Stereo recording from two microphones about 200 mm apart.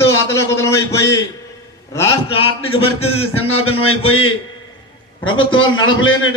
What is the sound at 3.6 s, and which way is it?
A man's voice, 90° left.